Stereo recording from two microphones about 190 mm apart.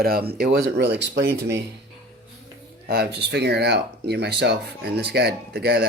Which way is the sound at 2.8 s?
55° right (ahead or behind).